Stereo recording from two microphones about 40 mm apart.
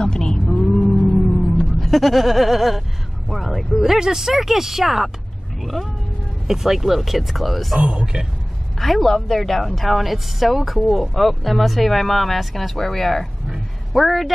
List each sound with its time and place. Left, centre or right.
0.0 s a sound: left
0.5 s music: centre
1.8 s a woman's voice: centre
6.4 s a woman's voice: centre
7.8 s a man's voice: right
8.7 s a woman's voice: centre